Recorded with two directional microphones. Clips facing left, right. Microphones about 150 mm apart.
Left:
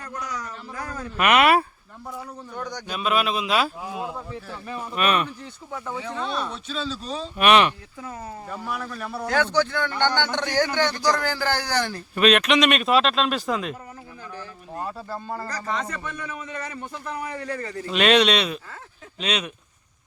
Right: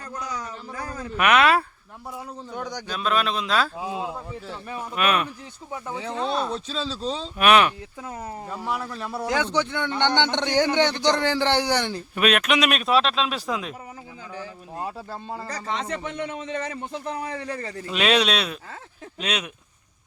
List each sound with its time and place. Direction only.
0.1 s a sound: 30° right (ahead or behind)
1.1 s speech: 5° left (ahead or behind)
2.6 s speech: 5° right (ahead or behind)
2.8 s speech: 5° left (ahead or behind)
3.8 s a man's voice: 20° right (ahead or behind)
4.7 s speech: 5° right (ahead or behind)
5.7 s speech: 20° right (ahead or behind)
7.3 s speech: centre (ahead or behind)
8.4 s a man's voice: 20° right (ahead or behind)
12.1 s speech: 5° right (ahead or behind)
15.3 s a man's voice: 20° right (ahead or behind)
17.8 s speech: centre (ahead or behind)